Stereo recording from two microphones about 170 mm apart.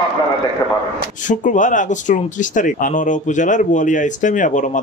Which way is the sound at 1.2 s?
50° left (ahead or behind).